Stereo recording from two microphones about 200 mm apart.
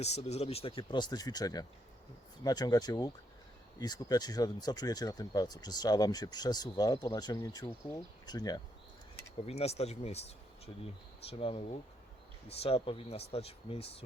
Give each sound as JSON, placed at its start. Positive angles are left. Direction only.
{"t": 0.0, "sound": "speech", "side_deg": 30}
{"t": 9.5, "sound": "speech", "side_deg": 30}